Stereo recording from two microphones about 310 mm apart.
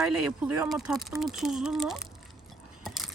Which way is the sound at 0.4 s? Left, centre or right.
Centre.